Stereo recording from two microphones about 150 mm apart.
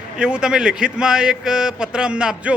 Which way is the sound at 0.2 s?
5° right (ahead or behind).